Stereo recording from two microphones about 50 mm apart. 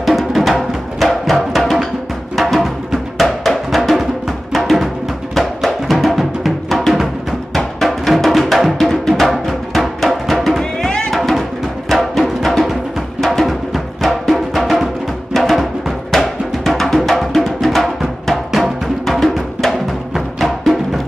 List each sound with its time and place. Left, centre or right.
0.0 s music: centre
10.6 s music: centre
11.1 s music: centre